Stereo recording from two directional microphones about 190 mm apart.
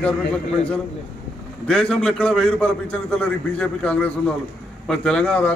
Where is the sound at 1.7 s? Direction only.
5° left (ahead or behind).